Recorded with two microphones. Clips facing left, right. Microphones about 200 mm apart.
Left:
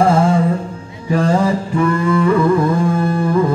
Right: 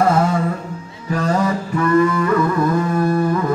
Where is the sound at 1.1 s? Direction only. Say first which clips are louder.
Left 4 dB; 30° left (ahead or behind).